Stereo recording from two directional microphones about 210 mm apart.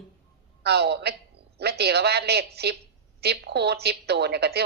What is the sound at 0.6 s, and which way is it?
A man's voice, 50° right (ahead or behind).